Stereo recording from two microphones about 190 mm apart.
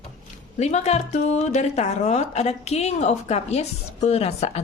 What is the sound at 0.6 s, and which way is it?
Speech, 35° left (ahead or behind).